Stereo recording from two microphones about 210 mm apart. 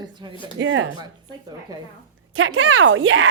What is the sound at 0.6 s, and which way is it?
Speech, 60° right (ahead or behind).